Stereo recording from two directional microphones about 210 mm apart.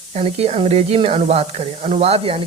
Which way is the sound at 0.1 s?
30° right (ahead or behind).